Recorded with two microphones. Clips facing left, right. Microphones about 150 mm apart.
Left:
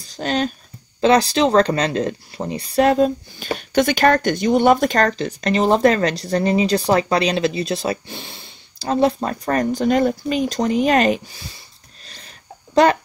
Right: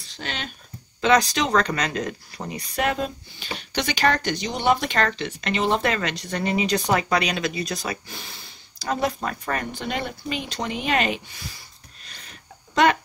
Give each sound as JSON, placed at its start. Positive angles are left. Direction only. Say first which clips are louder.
{"t": 0.0, "sound": "speech", "louder": "left 12 dB", "side_deg": 40}